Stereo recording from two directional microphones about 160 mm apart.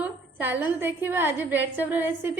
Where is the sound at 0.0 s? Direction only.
10° right (ahead or behind).